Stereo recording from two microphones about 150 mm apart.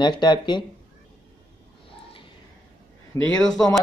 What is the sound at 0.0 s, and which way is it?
Speech, 30° left (ahead or behind).